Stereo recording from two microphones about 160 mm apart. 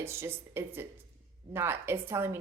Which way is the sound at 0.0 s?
15° right (ahead or behind).